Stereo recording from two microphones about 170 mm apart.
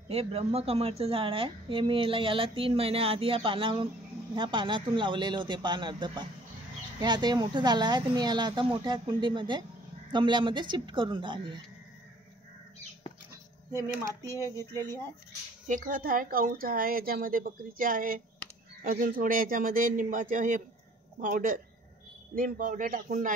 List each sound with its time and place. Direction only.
0.1 s a woman's voice: 35° right (ahead or behind)
14.3 s speech: 15° left (ahead or behind)
14.7 s speech: 25° right (ahead or behind)
15.6 s a woman's voice: 50° right (ahead or behind)